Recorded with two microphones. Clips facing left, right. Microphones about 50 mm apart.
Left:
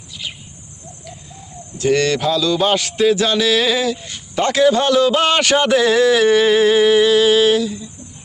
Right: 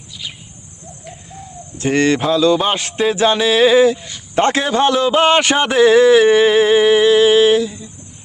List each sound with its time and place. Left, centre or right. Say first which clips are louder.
1.8 s a man's voice: right 1 dB; right